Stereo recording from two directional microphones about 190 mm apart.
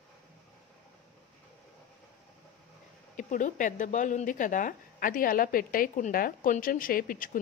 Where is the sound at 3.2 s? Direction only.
45° left (ahead or behind).